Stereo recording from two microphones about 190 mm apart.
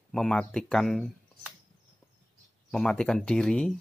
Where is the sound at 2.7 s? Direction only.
5° left (ahead or behind).